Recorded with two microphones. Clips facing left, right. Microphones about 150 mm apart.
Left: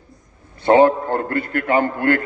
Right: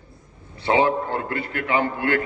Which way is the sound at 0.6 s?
50° left (ahead or behind).